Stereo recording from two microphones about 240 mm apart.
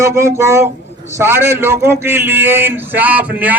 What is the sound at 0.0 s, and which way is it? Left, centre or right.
A man's voice, centre.